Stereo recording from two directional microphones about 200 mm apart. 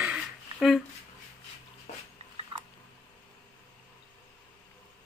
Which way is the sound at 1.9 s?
35° left (ahead or behind).